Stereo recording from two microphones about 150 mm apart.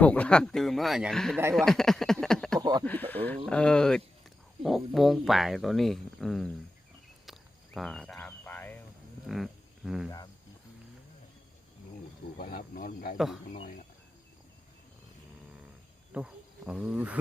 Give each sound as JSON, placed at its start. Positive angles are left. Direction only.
{"t": 0.0, "sound": "speech", "side_deg": 10}
{"t": 2.2, "sound": "a sound", "side_deg": 5}
{"t": 2.6, "sound": "a sound", "side_deg": -25}
{"t": 2.8, "sound": "speech", "side_deg": 10}
{"t": 7.3, "sound": "cricket", "side_deg": 0}
{"t": 9.2, "sound": "cricket", "side_deg": 0}
{"t": 12.4, "sound": "speech", "side_deg": 70}
{"t": 13.1, "sound": "speech", "side_deg": 0}
{"t": 16.1, "sound": "cricket", "side_deg": -5}